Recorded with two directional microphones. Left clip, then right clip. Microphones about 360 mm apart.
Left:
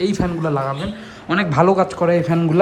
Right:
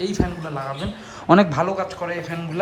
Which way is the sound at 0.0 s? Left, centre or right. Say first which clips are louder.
Left 5 dB; centre.